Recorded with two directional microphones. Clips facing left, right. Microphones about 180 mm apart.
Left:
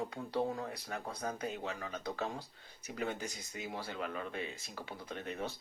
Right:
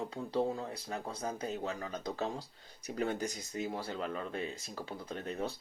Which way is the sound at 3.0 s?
40° right (ahead or behind).